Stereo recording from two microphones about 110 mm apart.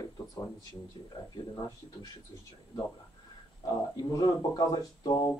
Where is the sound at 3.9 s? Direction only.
35° left (ahead or behind).